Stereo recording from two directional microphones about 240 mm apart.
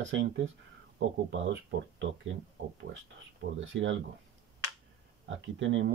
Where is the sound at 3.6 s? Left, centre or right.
Right.